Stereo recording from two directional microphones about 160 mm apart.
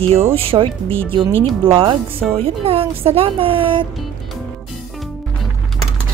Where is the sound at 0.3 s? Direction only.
35° right (ahead or behind).